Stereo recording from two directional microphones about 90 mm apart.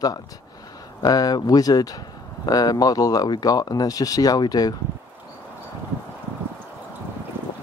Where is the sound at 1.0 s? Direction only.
45° left (ahead or behind).